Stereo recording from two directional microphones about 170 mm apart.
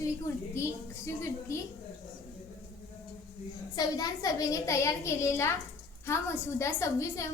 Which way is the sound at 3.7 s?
20° left (ahead or behind).